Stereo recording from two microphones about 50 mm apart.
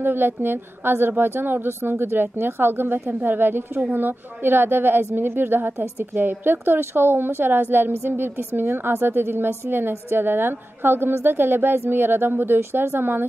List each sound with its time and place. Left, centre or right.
0.0 s a woman's voice: right